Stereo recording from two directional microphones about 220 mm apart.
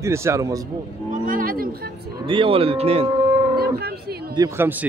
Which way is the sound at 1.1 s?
40° right (ahead or behind).